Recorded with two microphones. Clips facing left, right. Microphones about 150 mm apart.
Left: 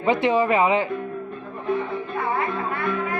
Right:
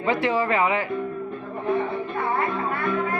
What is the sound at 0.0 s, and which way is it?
Speech, 20° left (ahead or behind).